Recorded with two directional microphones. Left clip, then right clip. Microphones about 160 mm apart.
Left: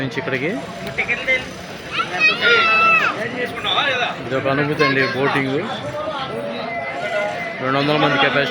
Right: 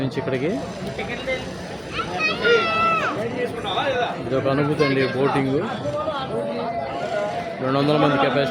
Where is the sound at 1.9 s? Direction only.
85° right.